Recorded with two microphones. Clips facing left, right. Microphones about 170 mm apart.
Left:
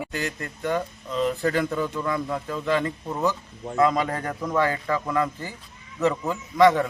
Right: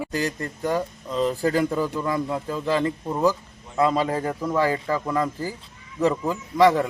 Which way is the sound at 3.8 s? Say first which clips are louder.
Right 1 dB; 30° right (ahead or behind).